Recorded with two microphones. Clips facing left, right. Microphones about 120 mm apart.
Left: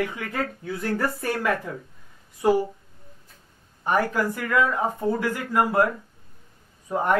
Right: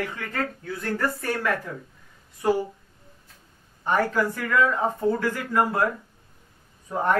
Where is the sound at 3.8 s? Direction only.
15° left (ahead or behind).